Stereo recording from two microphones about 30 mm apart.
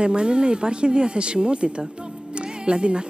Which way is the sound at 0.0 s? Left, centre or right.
Right.